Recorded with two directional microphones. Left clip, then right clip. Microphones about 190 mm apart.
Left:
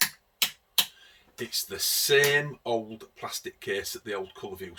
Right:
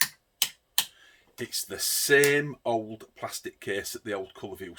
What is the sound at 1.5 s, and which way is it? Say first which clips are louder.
Speech: left 2 dB; 50° right (ahead or behind).